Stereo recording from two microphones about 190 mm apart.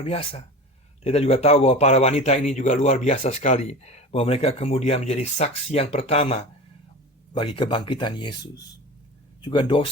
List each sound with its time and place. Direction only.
0.0 s a man's voice: 30° left (ahead or behind)
7.3 s speech: 30° left (ahead or behind)